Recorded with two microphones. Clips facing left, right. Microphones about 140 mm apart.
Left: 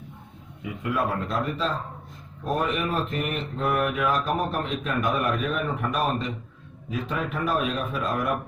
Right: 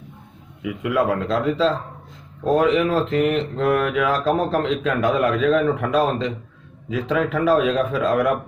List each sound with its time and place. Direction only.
0.6 s mantra: 90° right